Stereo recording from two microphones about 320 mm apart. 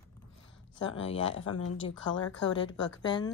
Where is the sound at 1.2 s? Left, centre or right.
Left.